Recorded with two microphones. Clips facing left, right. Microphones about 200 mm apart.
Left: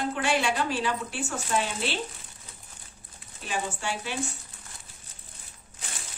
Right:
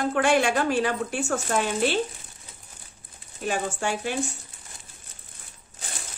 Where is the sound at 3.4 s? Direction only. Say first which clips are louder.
Right 5 dB; 45° right (ahead or behind).